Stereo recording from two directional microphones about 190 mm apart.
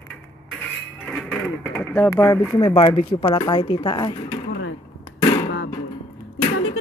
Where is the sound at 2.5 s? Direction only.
25° left (ahead or behind).